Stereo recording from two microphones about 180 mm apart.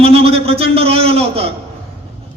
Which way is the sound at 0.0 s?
35° right (ahead or behind).